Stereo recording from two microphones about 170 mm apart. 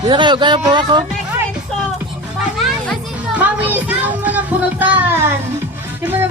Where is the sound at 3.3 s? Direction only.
10° right (ahead or behind).